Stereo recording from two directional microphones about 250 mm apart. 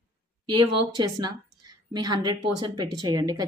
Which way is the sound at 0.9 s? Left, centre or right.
Centre.